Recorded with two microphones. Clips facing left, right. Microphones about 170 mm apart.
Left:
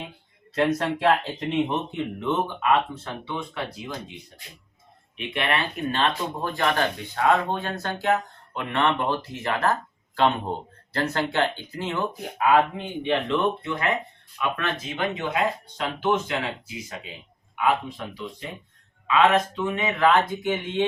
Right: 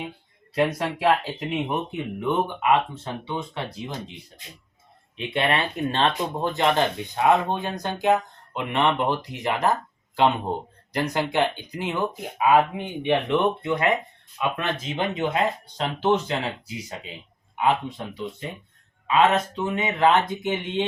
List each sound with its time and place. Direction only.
0.5 s speech: 10° right (ahead or behind)
5.1 s speech: 30° right (ahead or behind)
10.9 s speech: 15° right (ahead or behind)